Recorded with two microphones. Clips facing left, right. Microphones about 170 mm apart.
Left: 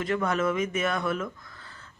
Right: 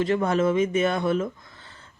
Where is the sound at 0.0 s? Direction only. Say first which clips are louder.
Right 4 dB; 30° right (ahead or behind).